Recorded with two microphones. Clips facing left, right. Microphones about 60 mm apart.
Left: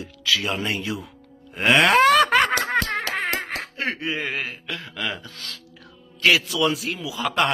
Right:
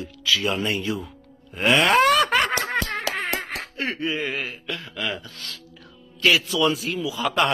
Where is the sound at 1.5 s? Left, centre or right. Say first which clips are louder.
Left 1 dB; left.